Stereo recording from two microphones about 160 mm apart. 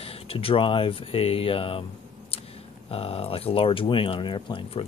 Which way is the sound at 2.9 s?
35° left (ahead or behind).